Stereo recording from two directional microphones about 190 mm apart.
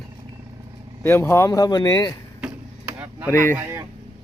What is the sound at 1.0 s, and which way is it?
Speech, 10° left (ahead or behind).